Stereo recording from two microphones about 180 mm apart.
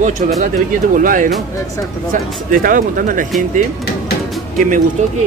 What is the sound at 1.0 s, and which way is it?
Speech, 50° right (ahead or behind).